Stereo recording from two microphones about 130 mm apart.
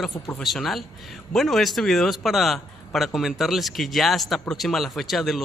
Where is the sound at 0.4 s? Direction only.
Centre (ahead or behind).